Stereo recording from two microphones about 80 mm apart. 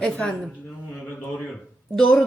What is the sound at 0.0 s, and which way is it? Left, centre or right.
Speech, centre.